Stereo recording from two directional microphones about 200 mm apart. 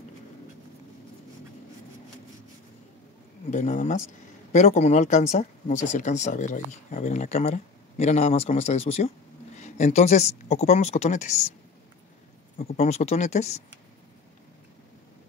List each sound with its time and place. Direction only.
3.4 s speech: 40° left (ahead or behind)
12.5 s speech: 35° left (ahead or behind)